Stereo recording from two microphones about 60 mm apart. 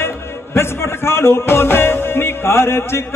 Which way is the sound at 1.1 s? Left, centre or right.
Left.